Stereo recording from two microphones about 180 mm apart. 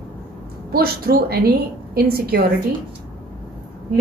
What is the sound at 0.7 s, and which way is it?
A woman's voice, 55° right (ahead or behind).